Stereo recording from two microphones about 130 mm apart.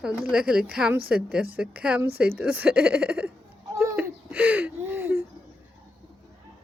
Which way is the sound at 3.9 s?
10° right (ahead or behind).